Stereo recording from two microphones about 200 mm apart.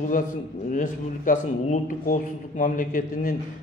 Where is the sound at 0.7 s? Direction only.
40° left (ahead or behind).